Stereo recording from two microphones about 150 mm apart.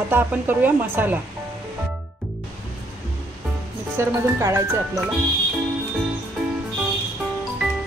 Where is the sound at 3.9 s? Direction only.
20° right (ahead or behind).